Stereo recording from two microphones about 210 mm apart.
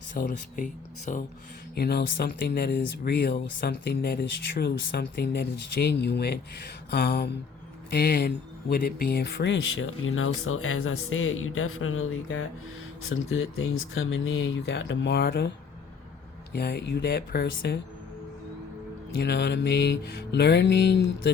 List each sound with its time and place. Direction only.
0.1 s speech: 40° left (ahead or behind)
1.7 s speech: 50° left (ahead or behind)
19.2 s mantra: 55° left (ahead or behind)